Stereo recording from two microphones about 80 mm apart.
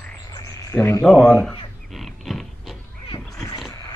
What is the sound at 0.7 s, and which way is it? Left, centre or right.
Speech, left.